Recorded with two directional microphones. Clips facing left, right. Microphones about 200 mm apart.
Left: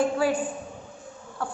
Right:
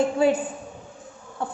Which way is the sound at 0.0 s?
20° right (ahead or behind).